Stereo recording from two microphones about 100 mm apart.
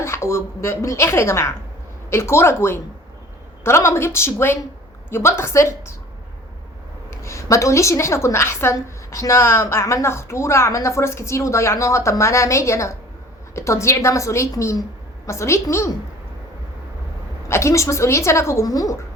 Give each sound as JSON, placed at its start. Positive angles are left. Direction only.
{"t": 0.0, "sound": "a woman's voice", "side_deg": 30}
{"t": 7.2, "sound": "a woman's voice", "side_deg": 30}
{"t": 17.5, "sound": "a woman's voice", "side_deg": 30}